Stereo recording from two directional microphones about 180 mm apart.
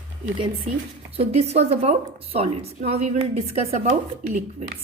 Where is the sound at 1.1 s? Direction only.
35° right (ahead or behind).